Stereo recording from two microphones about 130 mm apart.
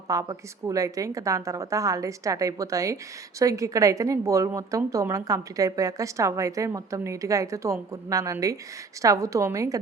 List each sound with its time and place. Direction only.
0.1 s a woman's voice: 25° right (ahead or behind)